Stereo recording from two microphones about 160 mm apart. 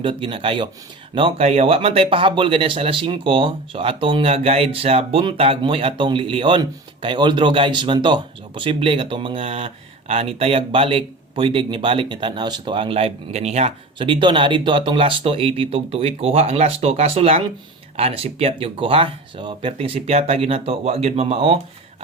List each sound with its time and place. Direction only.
0.0 s speech: 35° right (ahead or behind)